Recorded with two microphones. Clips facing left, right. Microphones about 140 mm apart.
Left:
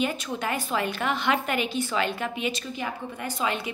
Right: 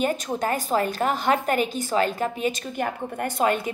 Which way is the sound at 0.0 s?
45° right (ahead or behind).